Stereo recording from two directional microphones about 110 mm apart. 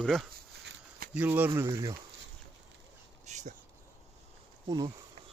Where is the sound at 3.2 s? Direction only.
90° right.